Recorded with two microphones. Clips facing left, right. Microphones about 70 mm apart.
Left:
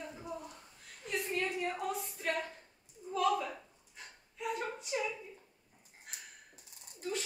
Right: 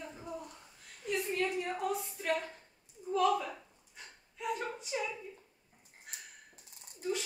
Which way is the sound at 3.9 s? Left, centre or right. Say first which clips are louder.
Even; centre.